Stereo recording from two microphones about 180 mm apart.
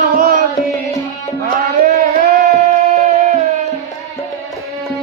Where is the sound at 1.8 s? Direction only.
50° right (ahead or behind).